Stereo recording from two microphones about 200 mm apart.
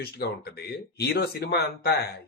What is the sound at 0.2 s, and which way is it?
Speech, 50° left (ahead or behind).